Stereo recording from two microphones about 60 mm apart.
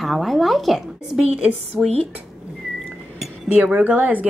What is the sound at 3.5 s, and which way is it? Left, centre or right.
Speech, right.